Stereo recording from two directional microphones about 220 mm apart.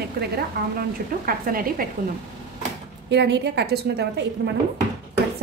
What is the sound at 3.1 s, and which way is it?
A woman's voice, 50° right (ahead or behind).